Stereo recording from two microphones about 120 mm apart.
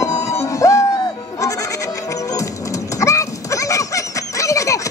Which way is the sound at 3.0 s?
25° left (ahead or behind).